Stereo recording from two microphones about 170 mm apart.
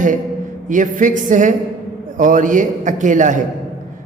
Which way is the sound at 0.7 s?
50° right (ahead or behind).